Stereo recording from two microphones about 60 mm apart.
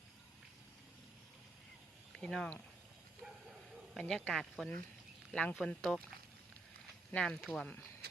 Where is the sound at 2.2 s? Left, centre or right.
Centre.